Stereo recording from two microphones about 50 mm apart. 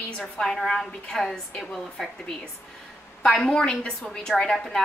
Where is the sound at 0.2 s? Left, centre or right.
Centre.